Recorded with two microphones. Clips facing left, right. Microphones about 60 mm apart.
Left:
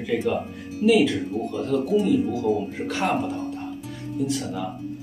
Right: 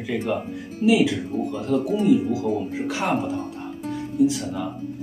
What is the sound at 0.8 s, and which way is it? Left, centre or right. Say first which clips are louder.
Speech: even; centre.